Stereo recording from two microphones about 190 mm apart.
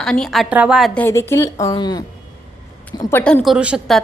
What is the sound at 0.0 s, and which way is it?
A woman's voice, 5° left (ahead or behind).